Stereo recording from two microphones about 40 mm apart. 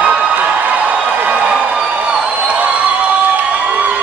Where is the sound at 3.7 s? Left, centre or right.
Right.